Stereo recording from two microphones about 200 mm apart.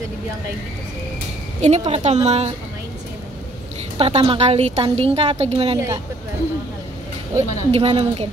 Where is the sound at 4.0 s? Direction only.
30° right (ahead or behind).